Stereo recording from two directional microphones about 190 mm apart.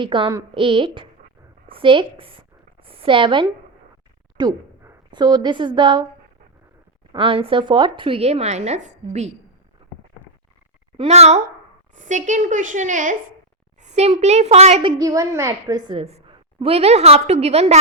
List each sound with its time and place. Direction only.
0.0 s a woman's voice: 25° right (ahead or behind)
7.1 s a woman's voice: 25° right (ahead or behind)
10.9 s a child's voice: 30° right (ahead or behind)